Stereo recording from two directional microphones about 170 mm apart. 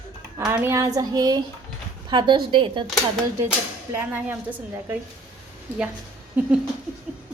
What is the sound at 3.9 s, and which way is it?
A woman's voice, 10° right (ahead or behind).